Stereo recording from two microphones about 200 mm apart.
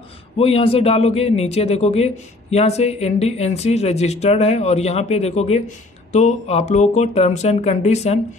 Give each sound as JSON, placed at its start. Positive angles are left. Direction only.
{"t": 0.4, "sound": "speech", "side_deg": 30}